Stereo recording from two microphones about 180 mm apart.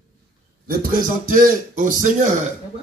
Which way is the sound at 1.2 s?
50° right (ahead or behind).